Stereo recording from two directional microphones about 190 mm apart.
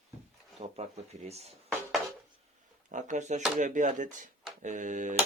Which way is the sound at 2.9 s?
40° right (ahead or behind).